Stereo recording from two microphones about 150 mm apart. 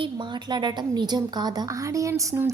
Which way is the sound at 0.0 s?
30° right (ahead or behind).